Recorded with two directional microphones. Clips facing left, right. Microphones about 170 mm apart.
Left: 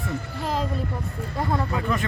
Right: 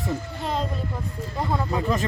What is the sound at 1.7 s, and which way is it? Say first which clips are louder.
Speech: right 2 dB; 30° right (ahead or behind).